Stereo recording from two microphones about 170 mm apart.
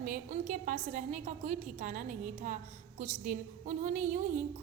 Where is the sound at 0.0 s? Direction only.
50° right (ahead or behind).